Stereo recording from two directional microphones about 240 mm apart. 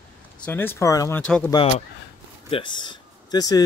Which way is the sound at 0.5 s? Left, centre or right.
Centre.